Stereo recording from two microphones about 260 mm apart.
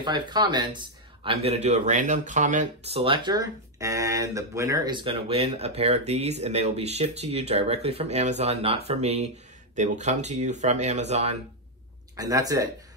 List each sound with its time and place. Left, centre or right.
0.0 s speech: centre
12.2 s speech: centre